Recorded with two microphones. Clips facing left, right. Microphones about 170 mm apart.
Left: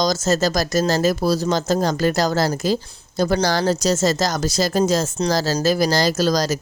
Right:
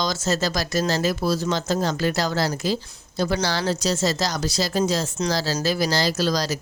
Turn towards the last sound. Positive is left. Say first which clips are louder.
# left 4 dB
turn(degrees=45)  # may be behind; listen again after turning